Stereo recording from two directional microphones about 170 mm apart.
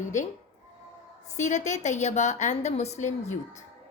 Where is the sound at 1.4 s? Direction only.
45° left (ahead or behind).